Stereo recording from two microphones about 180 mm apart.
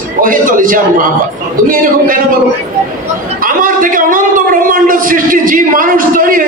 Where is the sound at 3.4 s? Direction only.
50° right (ahead or behind).